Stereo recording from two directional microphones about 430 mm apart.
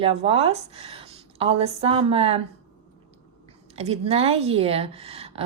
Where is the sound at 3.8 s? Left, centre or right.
Centre.